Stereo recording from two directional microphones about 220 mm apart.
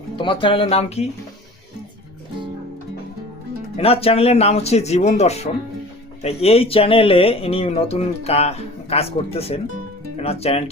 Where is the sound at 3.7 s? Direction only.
25° left (ahead or behind).